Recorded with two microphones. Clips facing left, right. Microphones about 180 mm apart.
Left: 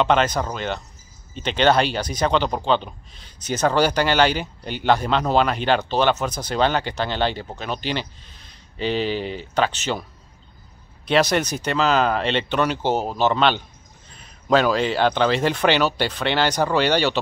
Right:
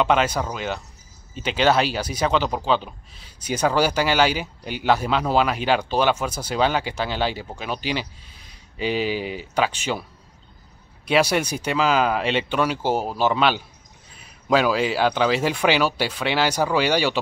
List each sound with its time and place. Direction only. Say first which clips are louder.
0.0 s speech: left 1 dB; 5° right (ahead or behind)
11.1 s speech: left 1 dB; 10° right (ahead or behind)